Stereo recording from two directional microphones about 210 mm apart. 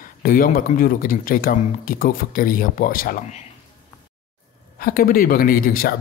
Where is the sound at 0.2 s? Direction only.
40° left (ahead or behind).